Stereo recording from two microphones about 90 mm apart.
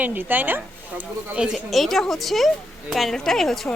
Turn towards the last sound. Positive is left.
turn(degrees=5)  # may be behind; listen again after turning